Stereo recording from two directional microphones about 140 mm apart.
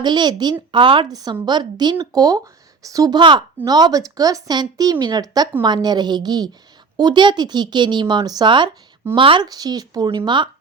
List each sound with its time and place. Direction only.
0.0 s a woman's voice: 30° right (ahead or behind)